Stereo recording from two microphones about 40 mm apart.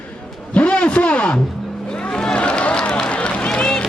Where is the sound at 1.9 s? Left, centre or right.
Left.